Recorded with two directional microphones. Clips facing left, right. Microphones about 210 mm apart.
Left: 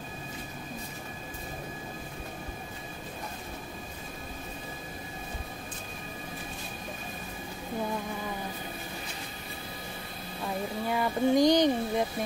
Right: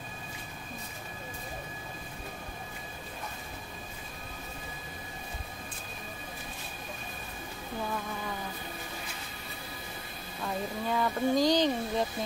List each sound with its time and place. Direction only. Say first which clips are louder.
10.4 s speech: left 1 dB; 10° left (ahead or behind)